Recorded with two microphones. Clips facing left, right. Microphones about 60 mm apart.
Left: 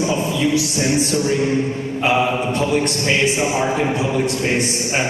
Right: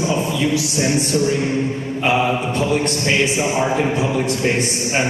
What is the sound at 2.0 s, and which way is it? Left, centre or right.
A man's voice, centre.